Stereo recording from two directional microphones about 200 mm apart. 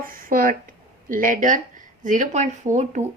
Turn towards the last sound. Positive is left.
turn(degrees=-35)  # may be behind; listen again after turning